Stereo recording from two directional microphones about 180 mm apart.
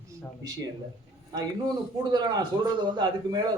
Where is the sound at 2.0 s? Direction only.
25° right (ahead or behind).